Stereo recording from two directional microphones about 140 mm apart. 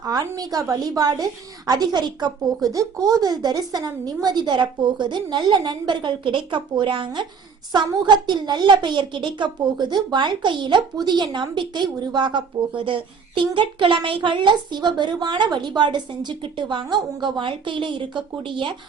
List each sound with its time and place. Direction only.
0.0 s a woman's voice: 25° right (ahead or behind)